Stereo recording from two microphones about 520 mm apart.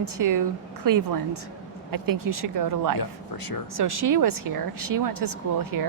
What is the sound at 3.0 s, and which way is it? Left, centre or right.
Speech, left.